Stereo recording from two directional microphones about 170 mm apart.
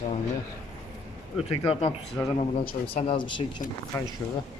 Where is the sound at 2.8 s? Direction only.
35° left (ahead or behind).